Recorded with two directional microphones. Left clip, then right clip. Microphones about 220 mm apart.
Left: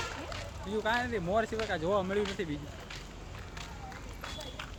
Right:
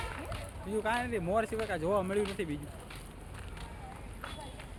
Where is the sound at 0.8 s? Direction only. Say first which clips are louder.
Left 2 dB; 10° right (ahead or behind).